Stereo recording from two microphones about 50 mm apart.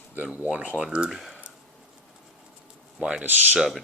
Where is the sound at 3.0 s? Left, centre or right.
Centre.